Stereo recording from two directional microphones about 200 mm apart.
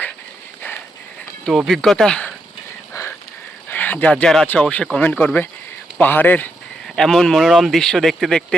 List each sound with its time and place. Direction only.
1.5 s speech: centre (ahead or behind)
2.9 s a sound: 15° left (ahead or behind)
3.7 s speech: 10° left (ahead or behind)